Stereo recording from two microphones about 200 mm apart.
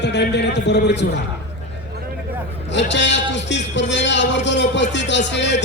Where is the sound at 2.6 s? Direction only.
65° left (ahead or behind).